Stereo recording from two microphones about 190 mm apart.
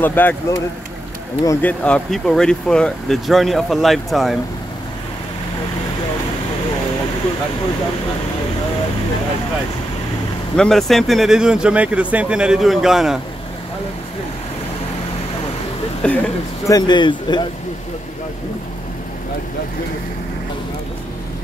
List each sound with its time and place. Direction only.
0.0 s speech: 10° left (ahead or behind)
10.5 s speech: centre (ahead or behind)
16.0 s speech: 5° left (ahead or behind)
16.6 s speech: 20° left (ahead or behind)